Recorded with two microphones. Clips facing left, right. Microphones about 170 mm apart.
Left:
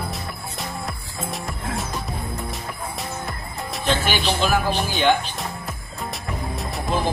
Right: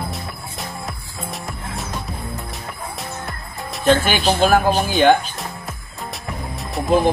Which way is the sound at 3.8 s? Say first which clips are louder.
Right 6 dB; 45° right (ahead or behind).